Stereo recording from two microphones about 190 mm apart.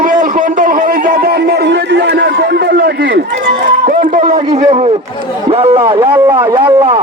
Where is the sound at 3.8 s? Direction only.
40° right (ahead or behind).